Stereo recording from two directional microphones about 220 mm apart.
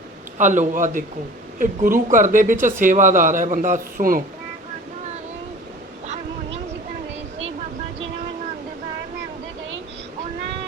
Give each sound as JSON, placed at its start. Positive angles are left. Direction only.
{"t": 0.3, "sound": "speech", "side_deg": -35}